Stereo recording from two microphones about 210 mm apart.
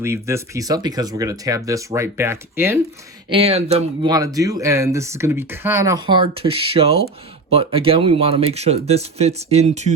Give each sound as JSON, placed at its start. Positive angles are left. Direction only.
{"t": 0.0, "sound": "speech", "side_deg": -10}
{"t": 3.3, "sound": "speech", "side_deg": -30}